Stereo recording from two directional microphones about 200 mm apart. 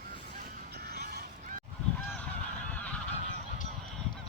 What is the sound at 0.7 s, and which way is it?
Honk, 55° right (ahead or behind).